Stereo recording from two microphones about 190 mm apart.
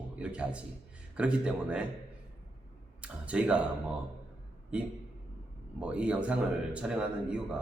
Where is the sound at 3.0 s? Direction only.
5° right (ahead or behind).